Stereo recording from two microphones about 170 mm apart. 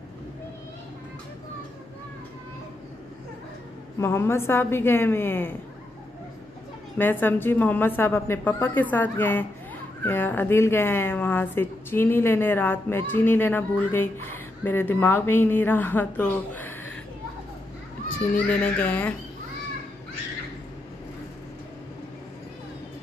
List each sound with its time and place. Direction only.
4.0 s speech: 15° left (ahead or behind)
7.0 s speech: 10° left (ahead or behind)
18.3 s speech: 10° left (ahead or behind)